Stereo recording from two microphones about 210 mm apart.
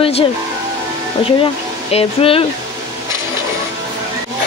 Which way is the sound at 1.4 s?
25° left (ahead or behind).